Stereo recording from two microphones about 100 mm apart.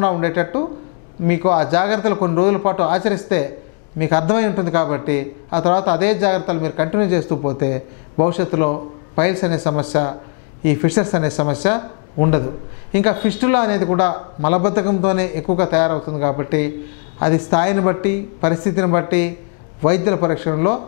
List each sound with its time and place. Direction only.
0.0 s a man's voice: 15° left (ahead or behind)